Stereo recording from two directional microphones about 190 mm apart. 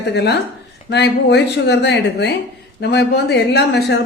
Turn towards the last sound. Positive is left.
turn(degrees=60)  # may be behind; listen again after turning